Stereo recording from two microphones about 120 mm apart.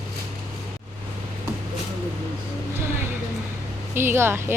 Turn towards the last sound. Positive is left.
turn(degrees=-20)  # may be behind; listen again after turning